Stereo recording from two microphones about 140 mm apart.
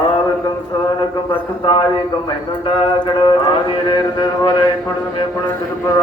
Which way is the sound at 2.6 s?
40° left (ahead or behind).